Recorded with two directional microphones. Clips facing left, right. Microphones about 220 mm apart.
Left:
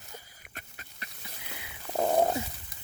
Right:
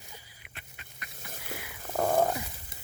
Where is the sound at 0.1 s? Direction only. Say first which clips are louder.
Left 7 dB; 40° left (ahead or behind).